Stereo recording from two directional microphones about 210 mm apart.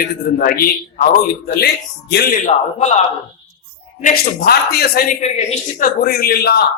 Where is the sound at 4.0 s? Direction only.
45° left (ahead or behind).